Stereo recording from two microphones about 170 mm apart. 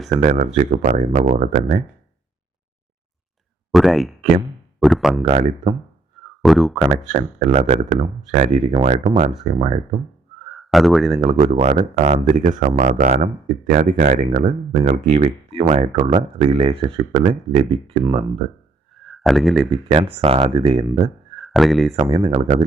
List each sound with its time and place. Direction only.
0.2 s speech: 45° right (ahead or behind)
3.7 s speech: centre (ahead or behind)
5.2 s speech: 40° right (ahead or behind)
6.4 s speech: centre (ahead or behind)
7.1 s speech: 45° right (ahead or behind)
10.5 s speech: centre (ahead or behind)
11.2 s speech: 40° right (ahead or behind)
18.0 s speech: 25° right (ahead or behind)
18.9 s a sound: centre (ahead or behind)
19.7 s speech: 35° right (ahead or behind)
21.3 s a sound: centre (ahead or behind)
22.1 s speech: 30° right (ahead or behind)